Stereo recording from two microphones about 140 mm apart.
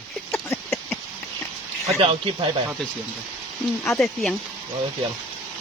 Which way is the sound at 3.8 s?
Centre (ahead or behind).